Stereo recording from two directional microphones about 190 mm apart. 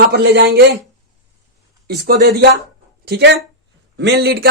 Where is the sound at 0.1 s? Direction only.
55° right (ahead or behind).